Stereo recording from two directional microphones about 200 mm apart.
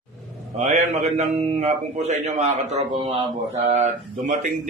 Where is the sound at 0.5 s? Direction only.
35° right (ahead or behind).